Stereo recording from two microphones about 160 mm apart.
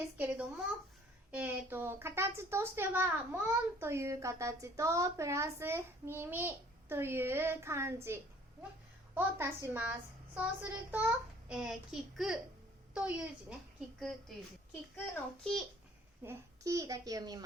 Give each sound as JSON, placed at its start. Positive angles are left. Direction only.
{"t": 0.2, "sound": "a woman's voice", "side_deg": -10}
{"t": 16.2, "sound": "a child's voice", "side_deg": -20}